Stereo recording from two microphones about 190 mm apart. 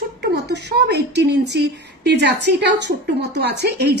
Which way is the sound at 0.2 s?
60° right (ahead or behind).